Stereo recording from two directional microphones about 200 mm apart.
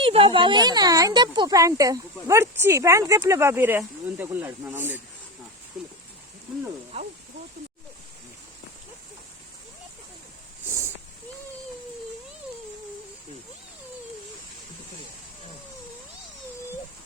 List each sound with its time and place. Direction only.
0.0 s speech: 25° right (ahead or behind); by 4.9 s 10° right (ahead or behind)
6.9 s speech: 30° right (ahead or behind)